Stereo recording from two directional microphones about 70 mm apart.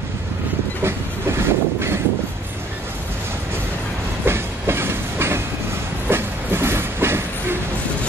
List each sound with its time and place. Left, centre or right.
0.8 s train: right
4.2 s train: right